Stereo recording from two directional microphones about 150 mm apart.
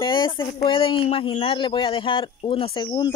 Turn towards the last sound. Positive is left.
turn(degrees=30)  # may be behind; listen again after turning